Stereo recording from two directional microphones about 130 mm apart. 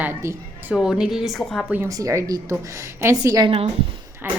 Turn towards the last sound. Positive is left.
turn(degrees=-15)  # may be behind; listen again after turning